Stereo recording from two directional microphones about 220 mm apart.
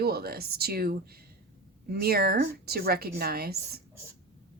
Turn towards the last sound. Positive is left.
turn(degrees=-45)  # may be behind; listen again after turning